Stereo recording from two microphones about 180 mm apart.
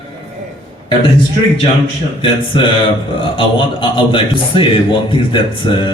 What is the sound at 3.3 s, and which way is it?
Speech, 30° left (ahead or behind).